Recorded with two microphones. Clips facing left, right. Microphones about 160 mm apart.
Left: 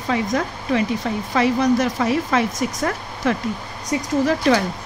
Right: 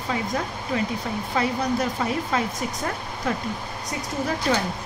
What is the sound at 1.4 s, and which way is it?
Speech, 90° left.